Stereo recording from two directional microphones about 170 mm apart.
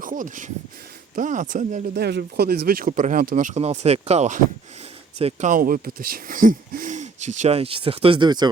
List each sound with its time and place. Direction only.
0.0 s speech: 50° right (ahead or behind)
2.0 s speech: 75° right (ahead or behind); by 8.4 s 25° right (ahead or behind)